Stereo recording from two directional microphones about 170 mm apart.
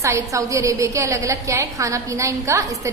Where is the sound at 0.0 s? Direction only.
15° right (ahead or behind).